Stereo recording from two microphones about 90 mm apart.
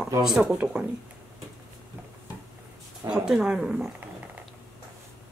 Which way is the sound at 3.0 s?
10° right (ahead or behind).